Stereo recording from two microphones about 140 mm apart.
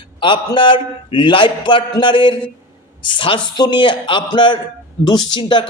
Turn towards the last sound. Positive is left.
turn(degrees=35)  # may be behind; listen again after turning